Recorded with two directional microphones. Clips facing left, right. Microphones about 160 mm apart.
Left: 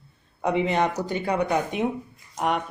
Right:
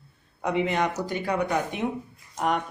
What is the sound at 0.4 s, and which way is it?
Speech, 25° left (ahead or behind).